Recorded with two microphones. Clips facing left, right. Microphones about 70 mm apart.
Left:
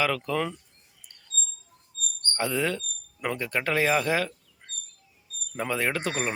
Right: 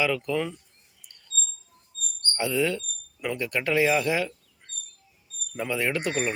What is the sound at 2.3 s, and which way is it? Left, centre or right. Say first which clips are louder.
Speech: right 2 dB; left.